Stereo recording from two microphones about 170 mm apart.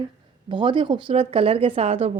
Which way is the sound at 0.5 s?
30° right (ahead or behind).